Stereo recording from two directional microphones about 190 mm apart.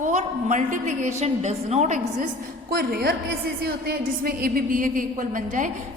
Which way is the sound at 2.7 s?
55° right (ahead or behind).